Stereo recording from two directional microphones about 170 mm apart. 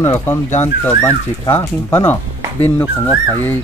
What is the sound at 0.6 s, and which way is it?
Speech, 15° left (ahead or behind).